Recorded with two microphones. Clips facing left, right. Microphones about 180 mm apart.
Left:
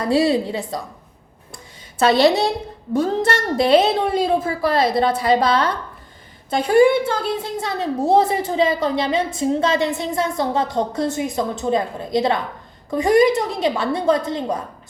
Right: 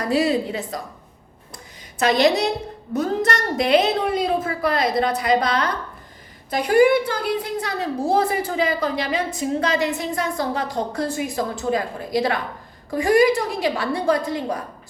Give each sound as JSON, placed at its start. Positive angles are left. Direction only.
{"t": 0.0, "sound": "a woman's voice", "side_deg": 30}
{"t": 2.0, "sound": "a woman's voice", "side_deg": 30}